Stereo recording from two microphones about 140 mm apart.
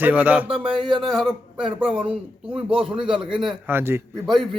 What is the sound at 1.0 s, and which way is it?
Speech, 5° left (ahead or behind).